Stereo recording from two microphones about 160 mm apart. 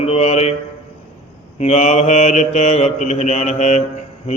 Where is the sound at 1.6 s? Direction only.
45° left (ahead or behind).